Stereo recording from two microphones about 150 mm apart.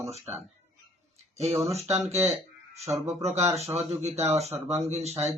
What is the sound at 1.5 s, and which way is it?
Speech, 45° right (ahead or behind).